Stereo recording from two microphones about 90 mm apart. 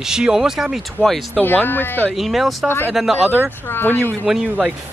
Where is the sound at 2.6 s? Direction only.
25° left (ahead or behind).